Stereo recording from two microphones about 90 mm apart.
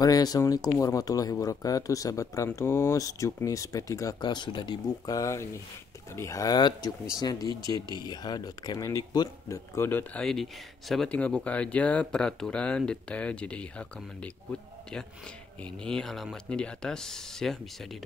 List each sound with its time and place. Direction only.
0.0 s speech: 45° left (ahead or behind)
4.2 s speech: 55° left (ahead or behind)
5.0 s speech: 40° left (ahead or behind)
9.8 s speech: 20° left (ahead or behind)
10.2 s speech: centre (ahead or behind)
11.1 s speech: 15° left (ahead or behind)